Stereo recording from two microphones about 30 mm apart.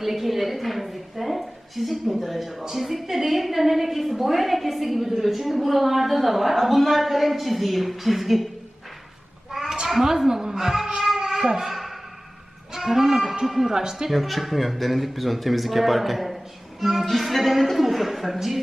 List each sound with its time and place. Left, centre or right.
0.0 s a woman's voice: centre
10.0 s speech: centre
11.2 s a sound: centre
11.7 s a sound: centre
12.7 s livestock: centre
13.4 s a man's voice: centre
14.1 s a woman's voice: centre